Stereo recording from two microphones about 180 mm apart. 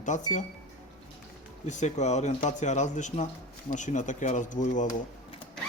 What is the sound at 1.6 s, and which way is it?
Speech, 40° left (ahead or behind).